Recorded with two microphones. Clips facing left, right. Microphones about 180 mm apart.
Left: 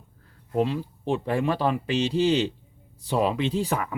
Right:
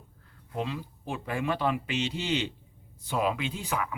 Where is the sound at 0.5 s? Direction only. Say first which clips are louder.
Left 8 dB; 35° left (ahead or behind).